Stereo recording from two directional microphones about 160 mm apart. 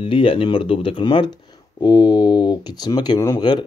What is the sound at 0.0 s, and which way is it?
Speech, 35° left (ahead or behind).